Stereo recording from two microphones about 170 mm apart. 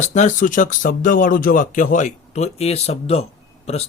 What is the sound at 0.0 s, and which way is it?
Speech, 45° left (ahead or behind).